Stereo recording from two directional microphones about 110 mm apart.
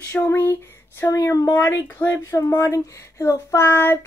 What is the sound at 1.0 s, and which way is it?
Speech, 30° left (ahead or behind).